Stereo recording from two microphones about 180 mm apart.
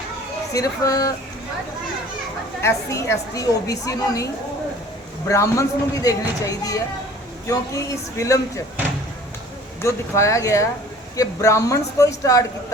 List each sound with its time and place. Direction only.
0.5 s speech: 20° left (ahead or behind)
2.6 s a woman's voice: 15° left (ahead or behind)
5.3 s a woman's voice: 15° left (ahead or behind)
9.8 s a woman's voice: 15° left (ahead or behind)